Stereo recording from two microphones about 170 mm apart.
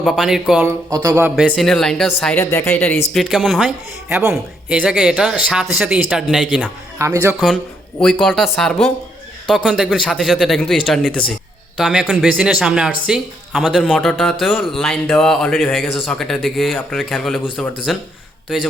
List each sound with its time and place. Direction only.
0.0 s speech: centre (ahead or behind)
0.9 s speech: 20° right (ahead or behind)
1.4 s speech: centre (ahead or behind)
7.0 s speech: 15° right (ahead or behind)
7.3 s speech: centre (ahead or behind)